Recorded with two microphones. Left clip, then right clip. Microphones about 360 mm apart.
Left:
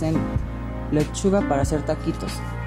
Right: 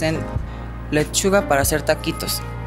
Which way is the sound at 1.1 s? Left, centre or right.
Right.